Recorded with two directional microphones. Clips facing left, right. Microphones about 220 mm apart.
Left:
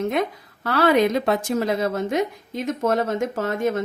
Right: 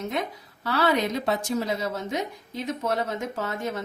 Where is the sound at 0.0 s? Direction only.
55° left (ahead or behind); by 1.5 s 75° left (ahead or behind).